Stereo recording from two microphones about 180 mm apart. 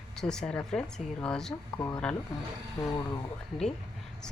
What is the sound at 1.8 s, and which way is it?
Speech, 15° left (ahead or behind).